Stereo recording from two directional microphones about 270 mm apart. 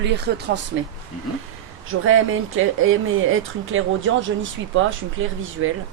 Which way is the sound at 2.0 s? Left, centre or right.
Right.